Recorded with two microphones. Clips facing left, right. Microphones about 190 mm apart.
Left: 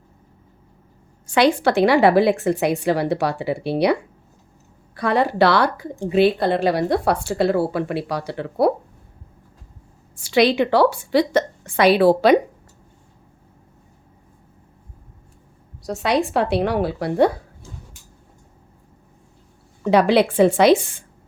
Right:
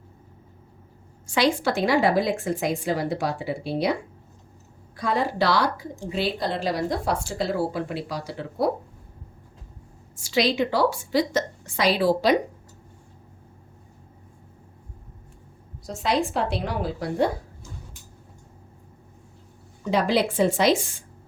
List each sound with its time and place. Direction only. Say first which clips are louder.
1.3 s speech: left 6 dB; 60° left (ahead or behind)
4.9 s speech: left 6 dB; 65° left (ahead or behind)
10.2 s speech: left 6 dB; 60° left (ahead or behind)
15.8 s speech: left 4 dB; 65° left (ahead or behind)
19.8 s speech: left 7 dB; 65° left (ahead or behind)